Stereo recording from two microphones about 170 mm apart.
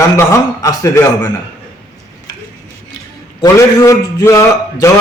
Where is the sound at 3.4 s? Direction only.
20° left (ahead or behind).